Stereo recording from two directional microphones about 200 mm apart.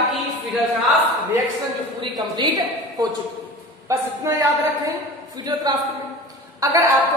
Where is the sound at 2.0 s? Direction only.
20° right (ahead or behind).